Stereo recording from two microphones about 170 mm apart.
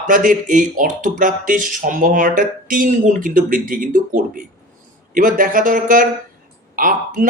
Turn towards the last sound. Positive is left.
turn(degrees=-50)  # may be behind; listen again after turning